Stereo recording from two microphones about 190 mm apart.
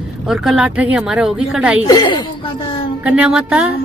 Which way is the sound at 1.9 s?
20° left (ahead or behind).